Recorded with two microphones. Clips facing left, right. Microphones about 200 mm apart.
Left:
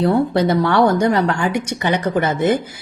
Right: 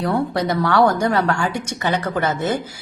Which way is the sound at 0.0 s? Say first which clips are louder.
Left 5 dB; 25° left (ahead or behind).